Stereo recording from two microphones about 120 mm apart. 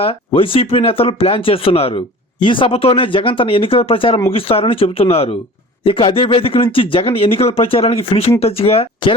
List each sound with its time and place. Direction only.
0.0 s speech: 50° left (ahead or behind)